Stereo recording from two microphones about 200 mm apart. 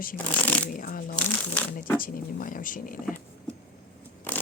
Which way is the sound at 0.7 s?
45° left (ahead or behind).